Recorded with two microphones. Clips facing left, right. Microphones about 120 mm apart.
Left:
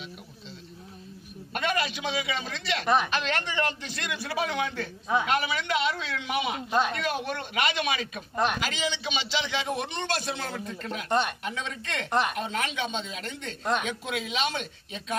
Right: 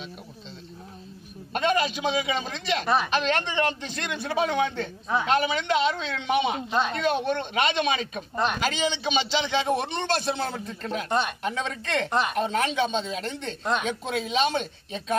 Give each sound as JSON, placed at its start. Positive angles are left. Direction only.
{"t": 1.5, "sound": "a man's voice", "side_deg": -25}
{"t": 11.1, "sound": "speech", "side_deg": -5}
{"t": 11.4, "sound": "a man's voice", "side_deg": -35}
{"t": 12.1, "sound": "a woman's voice", "side_deg": 0}
{"t": 12.4, "sound": "a man's voice", "side_deg": -35}